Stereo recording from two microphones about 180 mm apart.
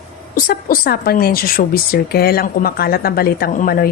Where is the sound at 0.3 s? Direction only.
55° left (ahead or behind).